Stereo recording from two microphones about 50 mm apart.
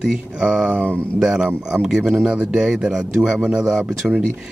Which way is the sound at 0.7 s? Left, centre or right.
Right.